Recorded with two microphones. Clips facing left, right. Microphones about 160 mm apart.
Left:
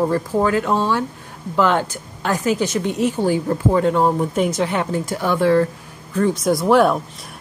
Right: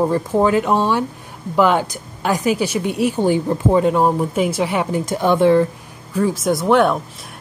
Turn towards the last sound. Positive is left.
turn(degrees=0)  # may be behind; listen again after turning